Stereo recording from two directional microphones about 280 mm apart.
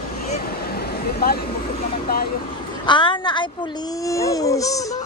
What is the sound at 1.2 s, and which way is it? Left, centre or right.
Speech, left.